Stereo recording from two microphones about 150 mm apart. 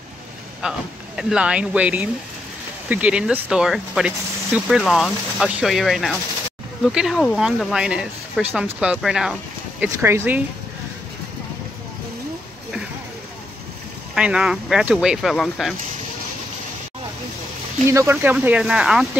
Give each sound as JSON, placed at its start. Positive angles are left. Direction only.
{"t": 0.6, "sound": "speech", "side_deg": -5}
{"t": 14.1, "sound": "speech", "side_deg": -5}
{"t": 17.8, "sound": "speech", "side_deg": -20}